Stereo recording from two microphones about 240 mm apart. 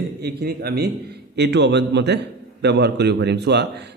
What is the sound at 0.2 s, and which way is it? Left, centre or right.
A man's voice, right.